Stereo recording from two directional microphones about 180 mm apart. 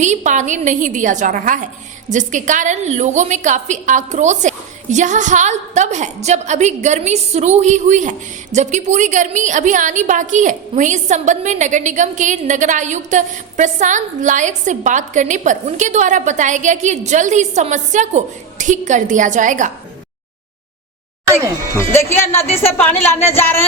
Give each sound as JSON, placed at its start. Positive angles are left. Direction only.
{"t": 0.0, "sound": "a woman's voice", "side_deg": -40}
{"t": 21.8, "sound": "speech", "side_deg": 15}